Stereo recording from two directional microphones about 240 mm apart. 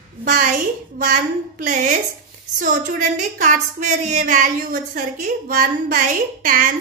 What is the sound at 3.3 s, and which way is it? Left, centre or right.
A woman's voice, right.